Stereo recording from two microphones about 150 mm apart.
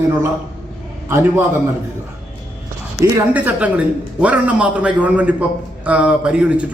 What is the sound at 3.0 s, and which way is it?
A man's voice, 10° right (ahead or behind).